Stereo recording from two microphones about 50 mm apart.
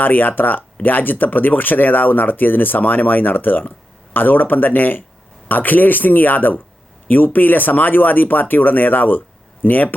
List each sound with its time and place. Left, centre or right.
0.0 s speech: left